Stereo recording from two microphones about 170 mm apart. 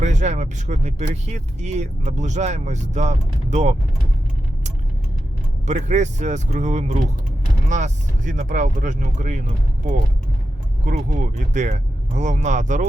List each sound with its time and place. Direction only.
0.0 s speech: 45° right (ahead or behind)
5.6 s speech: 45° right (ahead or behind)
10.8 s speech: 45° right (ahead or behind)